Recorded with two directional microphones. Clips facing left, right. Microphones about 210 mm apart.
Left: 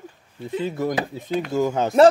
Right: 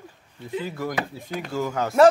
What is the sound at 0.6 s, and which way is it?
Speech, 20° left (ahead or behind).